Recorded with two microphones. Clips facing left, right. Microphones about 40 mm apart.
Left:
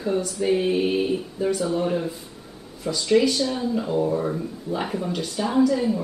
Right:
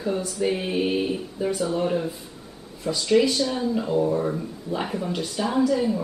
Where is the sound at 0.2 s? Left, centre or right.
Centre.